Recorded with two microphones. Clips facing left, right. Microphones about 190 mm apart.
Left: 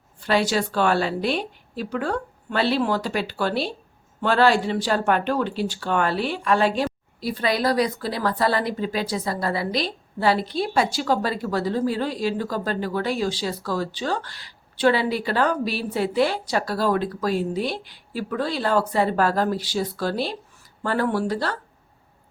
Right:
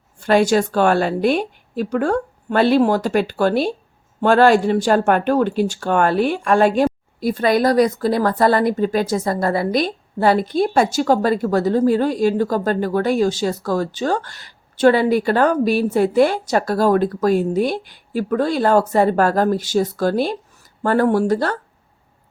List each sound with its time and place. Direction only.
0.2 s speech: 50° right (ahead or behind)